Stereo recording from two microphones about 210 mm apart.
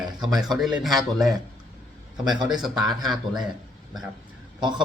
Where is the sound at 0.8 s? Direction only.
Centre (ahead or behind).